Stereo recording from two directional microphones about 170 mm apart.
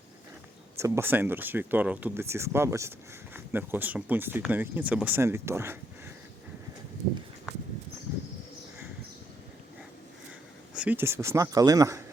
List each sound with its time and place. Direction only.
0.8 s speech: 15° right (ahead or behind)
10.8 s speech: 10° right (ahead or behind)